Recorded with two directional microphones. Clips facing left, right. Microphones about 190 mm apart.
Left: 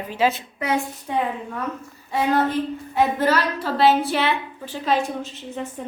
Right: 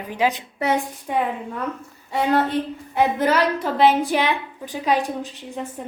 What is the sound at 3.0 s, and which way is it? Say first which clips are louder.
A woman's voice: right 1 dB; 15° right (ahead or behind).